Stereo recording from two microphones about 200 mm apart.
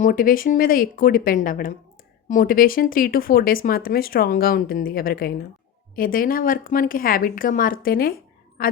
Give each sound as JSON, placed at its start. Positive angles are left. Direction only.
{"t": 0.0, "sound": "a woman's voice", "side_deg": 45}